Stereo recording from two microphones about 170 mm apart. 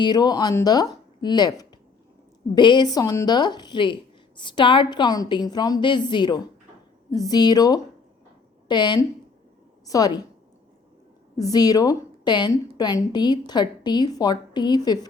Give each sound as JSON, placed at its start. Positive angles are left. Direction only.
{"t": 0.0, "sound": "a woman's voice", "side_deg": 25}
{"t": 11.3, "sound": "a woman's voice", "side_deg": 20}